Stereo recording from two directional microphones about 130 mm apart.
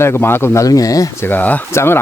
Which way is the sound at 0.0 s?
20° left (ahead or behind).